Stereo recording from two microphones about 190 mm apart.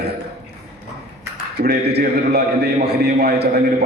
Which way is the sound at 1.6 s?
55° right (ahead or behind).